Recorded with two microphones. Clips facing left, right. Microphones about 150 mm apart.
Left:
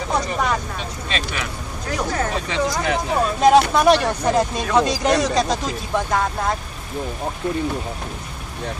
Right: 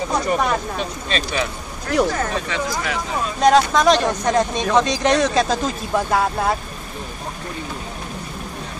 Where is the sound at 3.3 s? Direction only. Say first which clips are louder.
Even; 5° left (ahead or behind).